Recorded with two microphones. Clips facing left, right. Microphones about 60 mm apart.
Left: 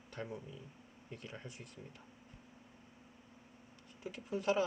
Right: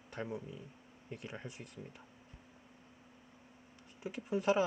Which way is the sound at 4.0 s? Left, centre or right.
Right.